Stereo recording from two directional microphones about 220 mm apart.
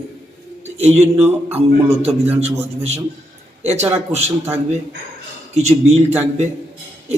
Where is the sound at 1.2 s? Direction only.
10° right (ahead or behind).